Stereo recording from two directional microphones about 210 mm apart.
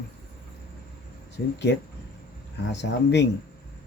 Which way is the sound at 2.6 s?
55° left (ahead or behind).